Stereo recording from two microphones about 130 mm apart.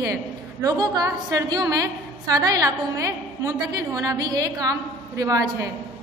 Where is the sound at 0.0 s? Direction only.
25° right (ahead or behind).